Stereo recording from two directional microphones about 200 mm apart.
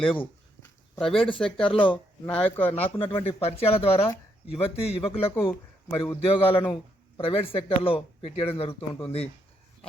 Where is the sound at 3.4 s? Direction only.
30° left (ahead or behind).